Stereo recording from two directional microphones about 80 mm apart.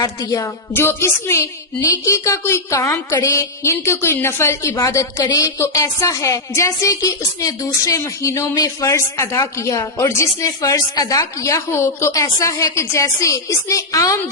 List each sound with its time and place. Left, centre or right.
0.0 s speech: left
0.4 s a woman's voice: left